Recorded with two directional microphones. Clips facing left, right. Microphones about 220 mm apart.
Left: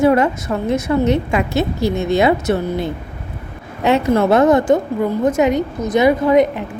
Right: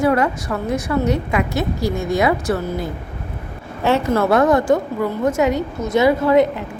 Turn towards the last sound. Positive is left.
turn(degrees=15)  # may be behind; listen again after turning